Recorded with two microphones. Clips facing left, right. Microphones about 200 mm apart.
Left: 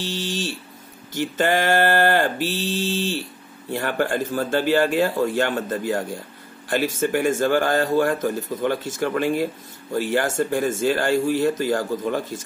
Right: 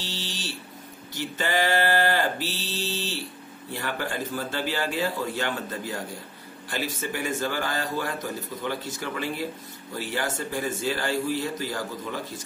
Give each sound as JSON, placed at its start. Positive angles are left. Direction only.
{"t": 0.0, "sound": "speech", "side_deg": 50}